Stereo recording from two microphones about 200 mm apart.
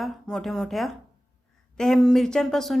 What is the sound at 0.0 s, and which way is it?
A woman's voice, centre (ahead or behind).